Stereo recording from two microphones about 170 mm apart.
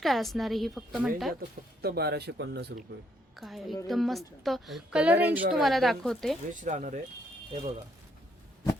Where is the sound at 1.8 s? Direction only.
70° right (ahead or behind).